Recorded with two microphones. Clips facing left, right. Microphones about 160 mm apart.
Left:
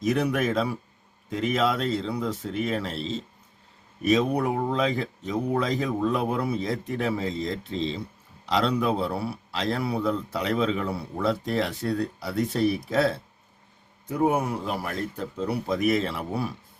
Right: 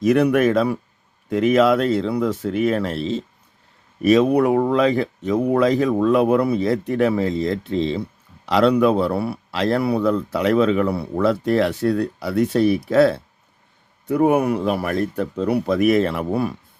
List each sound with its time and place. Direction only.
0.0 s a man's voice: 65° right (ahead or behind)